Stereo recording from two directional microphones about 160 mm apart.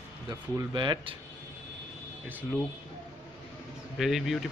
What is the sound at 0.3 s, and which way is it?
Speech, 25° right (ahead or behind).